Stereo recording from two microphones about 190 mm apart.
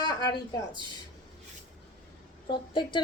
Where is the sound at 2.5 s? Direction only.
25° left (ahead or behind).